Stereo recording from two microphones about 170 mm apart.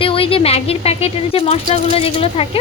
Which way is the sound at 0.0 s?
35° left (ahead or behind).